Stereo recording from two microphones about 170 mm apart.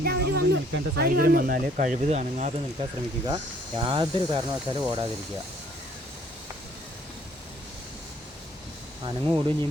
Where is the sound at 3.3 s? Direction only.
30° right (ahead or behind).